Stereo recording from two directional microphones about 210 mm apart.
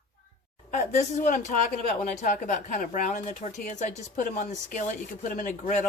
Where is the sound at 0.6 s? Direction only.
35° left (ahead or behind).